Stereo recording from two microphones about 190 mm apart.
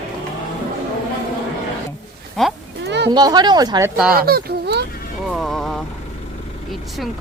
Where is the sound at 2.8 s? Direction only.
60° right (ahead or behind).